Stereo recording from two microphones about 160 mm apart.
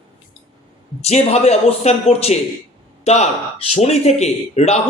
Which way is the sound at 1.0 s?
40° left (ahead or behind).